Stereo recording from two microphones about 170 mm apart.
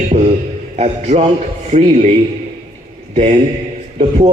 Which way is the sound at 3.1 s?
40° right (ahead or behind).